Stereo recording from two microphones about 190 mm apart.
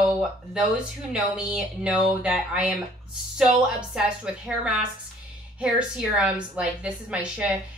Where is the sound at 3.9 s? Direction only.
5° right (ahead or behind).